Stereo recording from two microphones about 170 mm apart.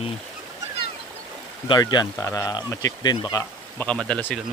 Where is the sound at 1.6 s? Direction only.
25° left (ahead or behind).